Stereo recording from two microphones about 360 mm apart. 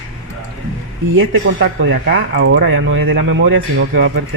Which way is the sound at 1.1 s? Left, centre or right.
Right.